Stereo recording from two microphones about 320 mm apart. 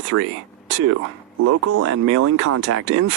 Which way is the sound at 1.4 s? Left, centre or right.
Right.